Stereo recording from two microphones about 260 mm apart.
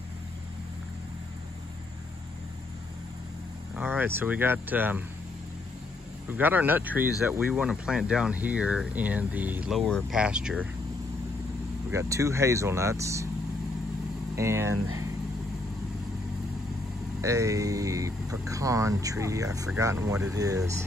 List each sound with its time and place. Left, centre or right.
3.7 s speech: centre
6.2 s speech: centre
11.9 s speech: centre
14.3 s speech: centre
17.2 s speech: centre